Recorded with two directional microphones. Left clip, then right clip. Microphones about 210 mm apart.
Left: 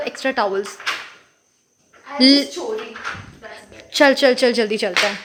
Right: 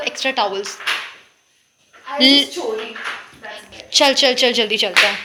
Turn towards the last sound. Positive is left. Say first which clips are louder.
# right 1 dB
turn(degrees=35)  # may be behind; listen again after turning